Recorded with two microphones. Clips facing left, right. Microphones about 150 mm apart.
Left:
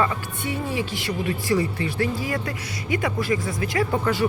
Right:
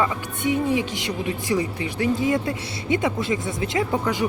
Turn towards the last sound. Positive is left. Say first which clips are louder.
# left 1 dB
turn(degrees=-15)  # may be behind; listen again after turning